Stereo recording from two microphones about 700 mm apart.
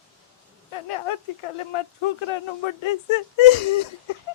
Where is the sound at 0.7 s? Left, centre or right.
Left.